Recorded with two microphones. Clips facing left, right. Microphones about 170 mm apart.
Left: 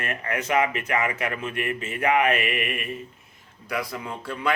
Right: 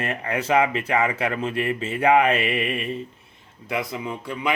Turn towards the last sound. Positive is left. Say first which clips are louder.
# right 2 dB
turn(degrees=-15)  # may be behind; listen again after turning